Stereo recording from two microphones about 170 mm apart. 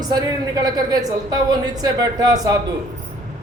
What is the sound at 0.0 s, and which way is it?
A woman's voice, 25° right (ahead or behind).